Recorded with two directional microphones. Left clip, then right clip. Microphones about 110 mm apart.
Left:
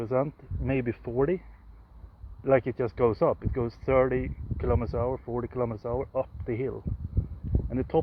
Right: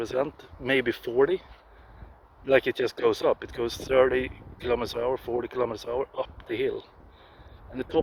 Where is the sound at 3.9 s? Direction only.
35° right (ahead or behind).